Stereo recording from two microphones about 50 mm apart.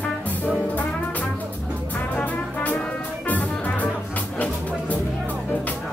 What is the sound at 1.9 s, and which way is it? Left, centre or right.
Music, left.